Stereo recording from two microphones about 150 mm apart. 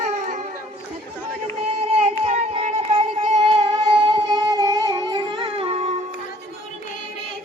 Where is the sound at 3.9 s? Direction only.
30° right (ahead or behind).